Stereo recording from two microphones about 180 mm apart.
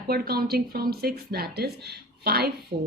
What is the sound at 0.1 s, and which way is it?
Speech, 60° right (ahead or behind).